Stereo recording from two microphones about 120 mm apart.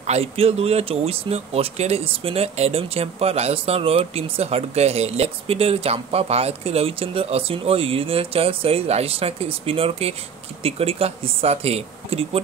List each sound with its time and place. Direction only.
0.0 s speech: 60° right (ahead or behind)